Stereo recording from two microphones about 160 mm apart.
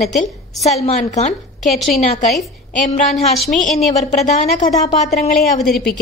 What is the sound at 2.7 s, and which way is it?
Speech, 55° left (ahead or behind).